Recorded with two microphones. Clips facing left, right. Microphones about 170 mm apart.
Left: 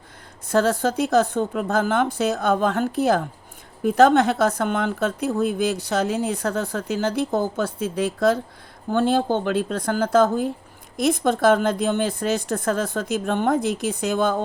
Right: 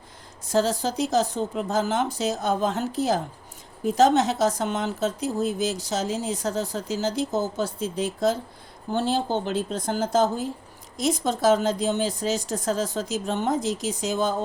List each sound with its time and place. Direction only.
0.4 s speech: 55° left (ahead or behind)